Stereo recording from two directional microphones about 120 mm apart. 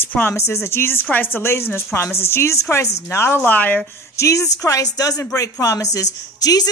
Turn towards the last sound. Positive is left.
turn(degrees=30)  # may be behind; listen again after turning